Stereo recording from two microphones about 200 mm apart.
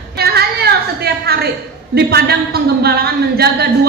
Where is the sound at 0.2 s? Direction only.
50° right (ahead or behind).